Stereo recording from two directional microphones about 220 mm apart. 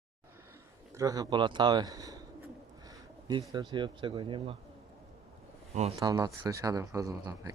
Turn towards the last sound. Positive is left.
turn(degrees=-15)  # may be behind; listen again after turning